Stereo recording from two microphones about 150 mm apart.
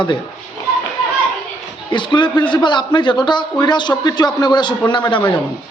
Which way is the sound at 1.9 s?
30° left (ahead or behind).